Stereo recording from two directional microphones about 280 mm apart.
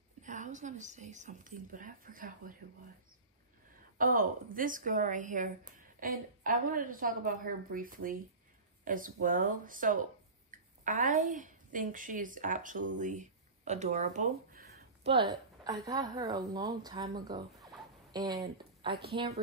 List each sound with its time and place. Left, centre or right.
0.2 s a woman's voice: right
4.0 s a woman's voice: right
15.6 s a woman's voice: centre